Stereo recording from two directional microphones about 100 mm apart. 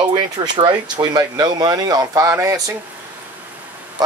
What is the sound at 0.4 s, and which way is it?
Speech, 50° right (ahead or behind).